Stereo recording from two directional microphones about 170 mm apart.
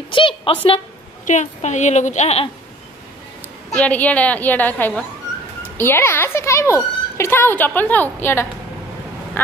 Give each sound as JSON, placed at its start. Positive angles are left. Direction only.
{"t": 0.1, "sound": "a sound", "side_deg": 30}
{"t": 1.2, "sound": "a woman's voice", "side_deg": 45}
{"t": 3.7, "sound": "speech", "side_deg": 10}